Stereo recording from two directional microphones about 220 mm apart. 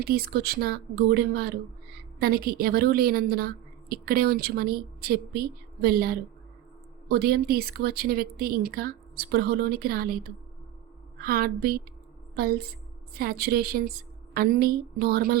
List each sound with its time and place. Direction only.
0.0 s a woman's voice: 45° right (ahead or behind)
11.2 s a woman's voice: 45° right (ahead or behind)
13.1 s a woman's voice: 45° right (ahead or behind)